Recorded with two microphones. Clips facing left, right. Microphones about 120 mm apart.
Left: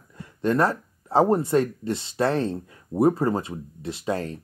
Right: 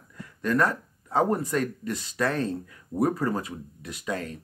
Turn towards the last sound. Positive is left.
turn(degrees=30)  # may be behind; listen again after turning